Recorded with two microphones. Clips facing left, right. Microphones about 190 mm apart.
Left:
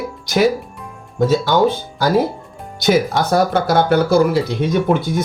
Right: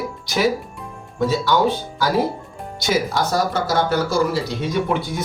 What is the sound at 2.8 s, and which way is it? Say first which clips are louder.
Speech: left 5 dB; 55° left (ahead or behind).